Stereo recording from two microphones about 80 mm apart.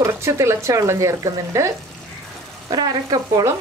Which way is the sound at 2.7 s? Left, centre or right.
Right.